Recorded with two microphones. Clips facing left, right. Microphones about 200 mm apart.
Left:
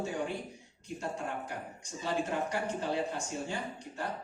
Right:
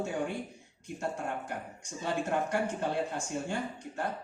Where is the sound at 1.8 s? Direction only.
55° right (ahead or behind).